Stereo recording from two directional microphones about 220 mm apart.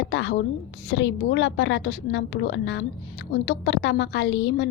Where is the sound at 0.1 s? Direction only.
55° left (ahead or behind).